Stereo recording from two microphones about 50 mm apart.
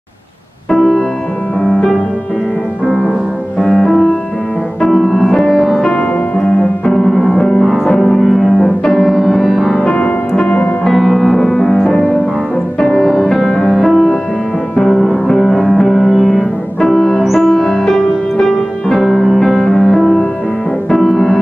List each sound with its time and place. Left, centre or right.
0.7 s music: centre
3.5 s music: centre
5.9 s music: left
6.9 s music: centre
7.6 s music: centre
9.8 s music: centre
10.9 s music: centre
11.5 s music: left
12.8 s music: centre
15.5 s music: left
15.8 s music: centre